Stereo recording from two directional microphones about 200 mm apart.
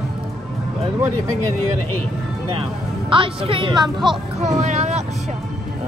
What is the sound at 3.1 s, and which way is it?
A woman's voice, 25° right (ahead or behind).